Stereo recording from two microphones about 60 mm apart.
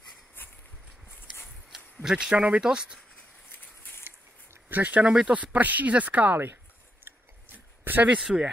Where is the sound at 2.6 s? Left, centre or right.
Centre.